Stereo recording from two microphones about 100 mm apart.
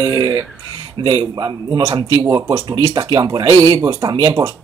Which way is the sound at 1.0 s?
50° right (ahead or behind).